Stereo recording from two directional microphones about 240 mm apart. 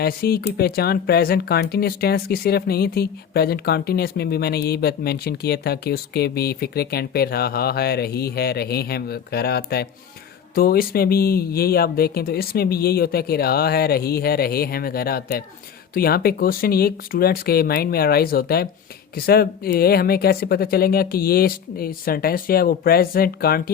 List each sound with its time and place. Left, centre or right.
0.0 s speech: left